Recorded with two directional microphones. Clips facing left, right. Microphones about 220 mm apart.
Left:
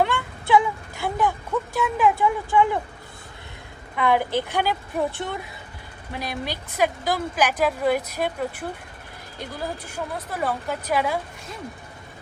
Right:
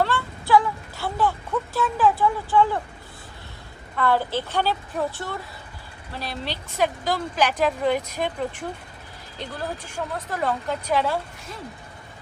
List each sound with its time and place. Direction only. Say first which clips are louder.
0.0 s child singing: left 1 dB; 15° left (ahead or behind)
1.7 s speech: even; 15° left (ahead or behind)
3.9 s speech: left 1 dB; 15° left (ahead or behind)